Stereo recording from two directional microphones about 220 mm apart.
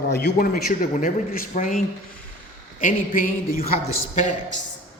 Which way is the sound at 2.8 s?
35° left (ahead or behind).